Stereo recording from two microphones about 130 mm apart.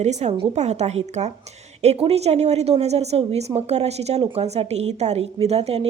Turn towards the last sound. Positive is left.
turn(degrees=-55)  # may be behind; listen again after turning